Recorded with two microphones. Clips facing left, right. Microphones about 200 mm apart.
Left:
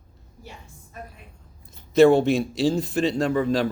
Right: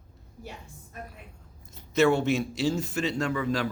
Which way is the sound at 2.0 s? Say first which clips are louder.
Left 7 dB; 35° left (ahead or behind).